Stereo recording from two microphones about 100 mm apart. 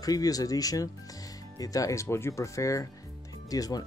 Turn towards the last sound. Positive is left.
turn(degrees=40)  # may be behind; listen again after turning